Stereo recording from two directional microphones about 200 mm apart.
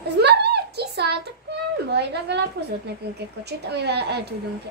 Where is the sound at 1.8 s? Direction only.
55° right (ahead or behind).